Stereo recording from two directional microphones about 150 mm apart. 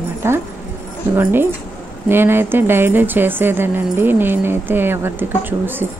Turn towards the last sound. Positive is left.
turn(degrees=-15)  # may be behind; listen again after turning